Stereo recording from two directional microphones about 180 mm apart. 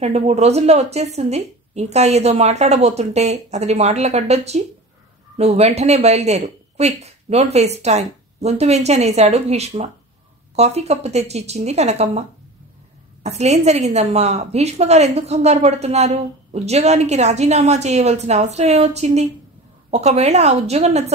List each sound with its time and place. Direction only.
0.0 s a woman's voice: 35° right (ahead or behind)